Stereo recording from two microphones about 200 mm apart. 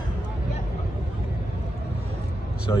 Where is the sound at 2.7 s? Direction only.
15° left (ahead or behind).